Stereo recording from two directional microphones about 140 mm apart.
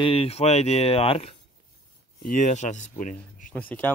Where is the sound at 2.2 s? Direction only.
60° left (ahead or behind).